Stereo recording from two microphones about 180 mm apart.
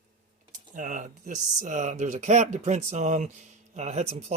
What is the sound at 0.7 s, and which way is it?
Speech, 50° right (ahead or behind).